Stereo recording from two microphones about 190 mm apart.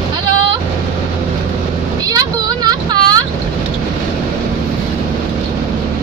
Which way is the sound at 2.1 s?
20° right (ahead or behind).